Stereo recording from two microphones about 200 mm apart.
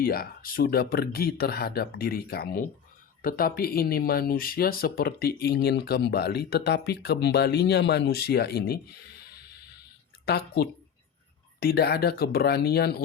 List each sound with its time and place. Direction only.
0.0 s speech: 50° left (ahead or behind)
10.2 s speech: 55° left (ahead or behind)